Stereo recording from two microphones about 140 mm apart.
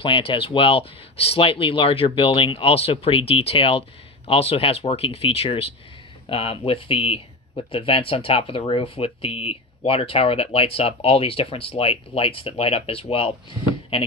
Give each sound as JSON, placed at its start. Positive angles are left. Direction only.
{"t": 0.0, "sound": "speech", "side_deg": 40}